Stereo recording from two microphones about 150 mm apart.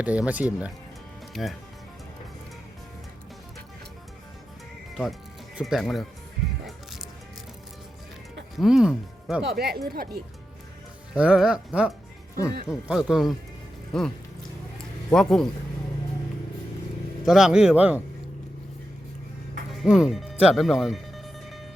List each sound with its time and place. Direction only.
0.0 s speech: 10° right (ahead or behind)
5.5 s speech: centre (ahead or behind)
8.5 s speech: centre (ahead or behind)
9.4 s speech: 90° right
11.1 s speech: 5° right (ahead or behind)
15.1 s speech: 5° left (ahead or behind)
17.2 s speech: 5° right (ahead or behind)
19.8 s speech: 5° right (ahead or behind)